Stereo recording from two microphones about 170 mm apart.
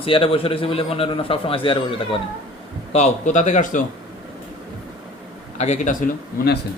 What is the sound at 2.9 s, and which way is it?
Speech, 45° left (ahead or behind).